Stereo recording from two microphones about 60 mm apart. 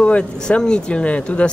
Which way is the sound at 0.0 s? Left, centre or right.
Centre.